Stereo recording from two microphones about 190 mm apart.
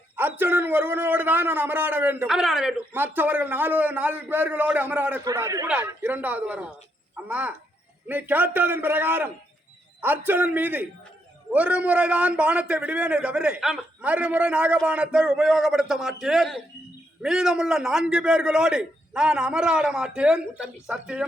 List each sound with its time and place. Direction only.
0.2 s a man's voice: 10° right (ahead or behind)